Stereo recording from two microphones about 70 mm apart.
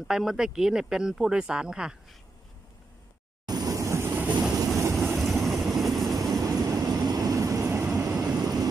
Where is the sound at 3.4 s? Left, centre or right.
Right.